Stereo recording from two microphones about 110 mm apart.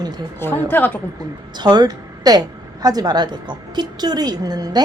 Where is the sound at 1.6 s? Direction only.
40° right (ahead or behind).